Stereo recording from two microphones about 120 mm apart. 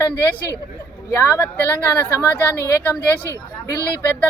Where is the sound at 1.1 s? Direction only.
20° left (ahead or behind).